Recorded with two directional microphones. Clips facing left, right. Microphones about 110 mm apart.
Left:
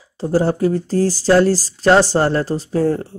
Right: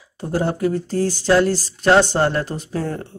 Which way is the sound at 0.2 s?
35° left (ahead or behind).